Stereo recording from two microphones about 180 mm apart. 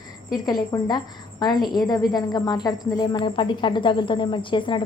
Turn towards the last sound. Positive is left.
turn(degrees=25)  # may be behind; listen again after turning